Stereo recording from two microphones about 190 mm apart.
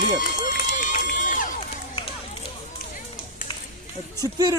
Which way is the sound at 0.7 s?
45° left (ahead or behind).